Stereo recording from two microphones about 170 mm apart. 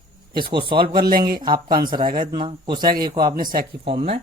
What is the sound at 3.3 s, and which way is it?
Speech, 55° right (ahead or behind).